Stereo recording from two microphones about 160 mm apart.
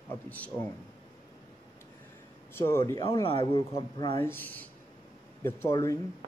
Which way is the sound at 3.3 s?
35° left (ahead or behind).